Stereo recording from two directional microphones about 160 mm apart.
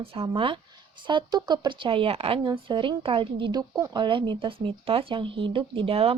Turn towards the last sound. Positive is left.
turn(degrees=-35)  # may be behind; listen again after turning